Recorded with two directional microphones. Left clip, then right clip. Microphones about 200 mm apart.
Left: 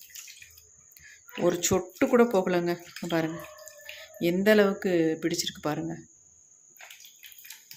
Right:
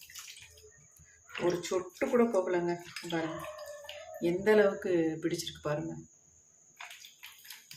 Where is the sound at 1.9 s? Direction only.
55° left (ahead or behind).